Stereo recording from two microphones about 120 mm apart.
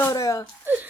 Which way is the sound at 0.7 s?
20° right (ahead or behind).